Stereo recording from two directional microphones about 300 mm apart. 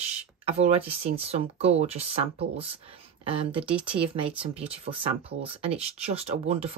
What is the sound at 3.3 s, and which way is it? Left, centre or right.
A woman's voice, centre.